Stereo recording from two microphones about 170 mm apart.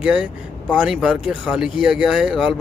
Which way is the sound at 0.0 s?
5° right (ahead or behind).